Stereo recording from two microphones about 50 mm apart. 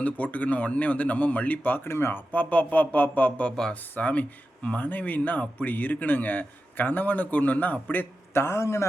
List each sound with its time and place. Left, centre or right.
0.0 s speech: left
1.9 s speech: left
2.3 s speech: left
8.3 s a man's voice: left